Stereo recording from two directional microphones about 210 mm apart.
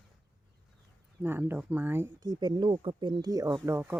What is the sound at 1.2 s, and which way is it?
Speech, 10° right (ahead or behind).